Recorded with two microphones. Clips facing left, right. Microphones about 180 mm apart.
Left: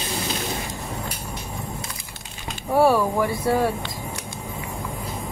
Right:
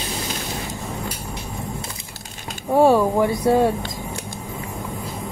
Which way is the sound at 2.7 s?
20° right (ahead or behind).